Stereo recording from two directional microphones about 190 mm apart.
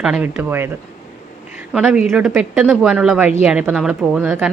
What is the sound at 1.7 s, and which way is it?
A woman's voice, 5° right (ahead or behind).